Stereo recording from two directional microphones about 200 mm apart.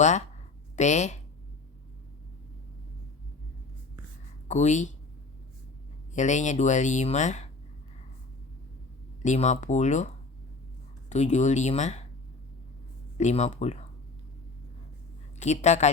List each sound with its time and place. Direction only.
0.8 s speech: 35° left (ahead or behind)
4.4 s speech: 35° left (ahead or behind)
6.1 s speech: 35° left (ahead or behind)
9.2 s speech: 35° left (ahead or behind)
11.1 s speech: 35° left (ahead or behind)
13.1 s speech: 35° left (ahead or behind)
15.4 s speech: 35° left (ahead or behind)